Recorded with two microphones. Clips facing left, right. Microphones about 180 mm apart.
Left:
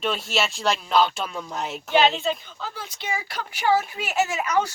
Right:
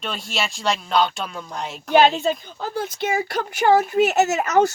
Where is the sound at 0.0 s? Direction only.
Centre (ahead or behind).